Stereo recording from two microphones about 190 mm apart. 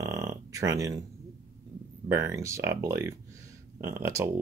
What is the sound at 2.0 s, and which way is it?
Speech, 15° right (ahead or behind).